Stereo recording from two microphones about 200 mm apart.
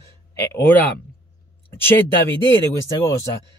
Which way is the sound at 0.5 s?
10° left (ahead or behind).